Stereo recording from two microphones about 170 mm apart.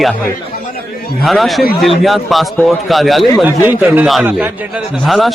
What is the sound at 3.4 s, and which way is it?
Speech, 10° right (ahead or behind).